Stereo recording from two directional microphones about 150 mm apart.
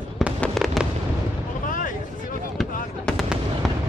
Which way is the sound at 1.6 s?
65° left (ahead or behind).